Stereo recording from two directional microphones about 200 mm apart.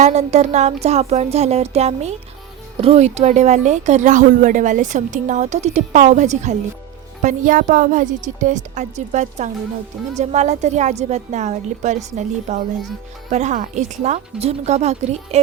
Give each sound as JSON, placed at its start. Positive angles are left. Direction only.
{"t": 0.0, "sound": "speech", "side_deg": -35}